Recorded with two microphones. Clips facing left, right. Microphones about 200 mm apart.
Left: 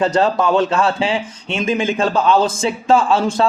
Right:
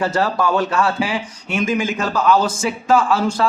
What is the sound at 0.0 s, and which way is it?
A man's voice, 20° left (ahead or behind).